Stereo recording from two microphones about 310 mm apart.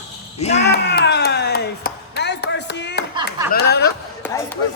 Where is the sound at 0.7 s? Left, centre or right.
Left.